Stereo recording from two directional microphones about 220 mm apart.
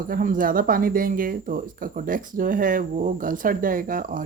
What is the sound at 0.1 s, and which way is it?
Speech, 40° right (ahead or behind).